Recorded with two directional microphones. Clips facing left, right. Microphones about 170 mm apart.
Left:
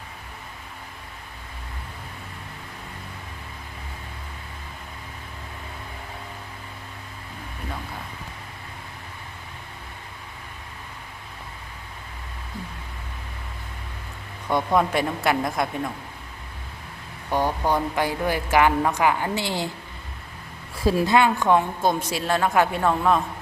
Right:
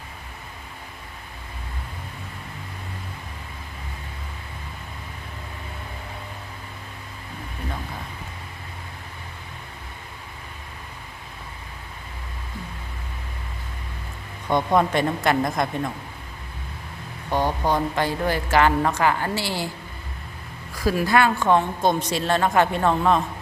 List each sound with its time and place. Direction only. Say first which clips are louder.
14.8 s speech: right 1 dB; 5° left (ahead or behind)
17.3 s a woman's voice: even; 10° left (ahead or behind)
20.7 s a woman's voice: left 1 dB; 25° left (ahead or behind); by 23.2 s 5° left (ahead or behind)